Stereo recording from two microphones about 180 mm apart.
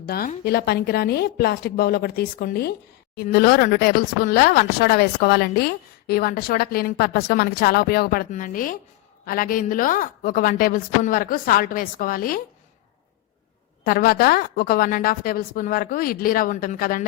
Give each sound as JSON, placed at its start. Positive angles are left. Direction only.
{"t": 0.0, "sound": "a woman's voice", "side_deg": 60}
{"t": 13.8, "sound": "a woman's voice", "side_deg": 55}